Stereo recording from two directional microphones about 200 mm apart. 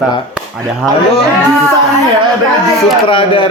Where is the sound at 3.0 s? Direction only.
25° left (ahead or behind).